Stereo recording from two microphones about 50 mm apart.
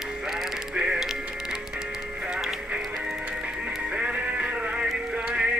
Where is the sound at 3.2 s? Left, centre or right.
Right.